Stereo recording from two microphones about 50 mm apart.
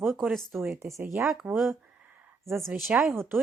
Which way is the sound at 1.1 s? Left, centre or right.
Centre.